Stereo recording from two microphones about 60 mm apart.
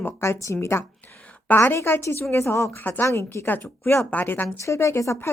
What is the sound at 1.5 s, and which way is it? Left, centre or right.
Speech, left.